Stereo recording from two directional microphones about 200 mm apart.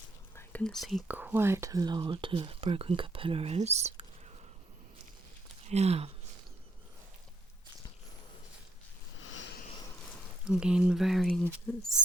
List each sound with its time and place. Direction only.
0.3 s speech: 5° left (ahead or behind); by 4.0 s 35° right (ahead or behind)
5.6 s speech: 35° right (ahead or behind)
9.2 s a sound: 70° left (ahead or behind)
10.4 s speech: 5° right (ahead or behind)